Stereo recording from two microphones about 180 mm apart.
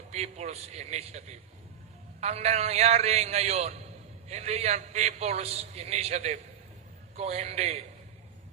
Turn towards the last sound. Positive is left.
turn(degrees=-35)  # may be behind; listen again after turning